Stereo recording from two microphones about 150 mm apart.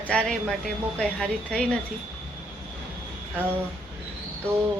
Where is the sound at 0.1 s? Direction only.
10° left (ahead or behind).